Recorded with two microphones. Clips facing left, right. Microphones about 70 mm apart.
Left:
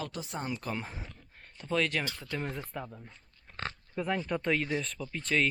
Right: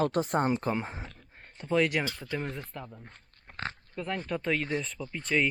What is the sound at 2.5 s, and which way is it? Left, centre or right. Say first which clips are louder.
Speech: left 1 dB; centre.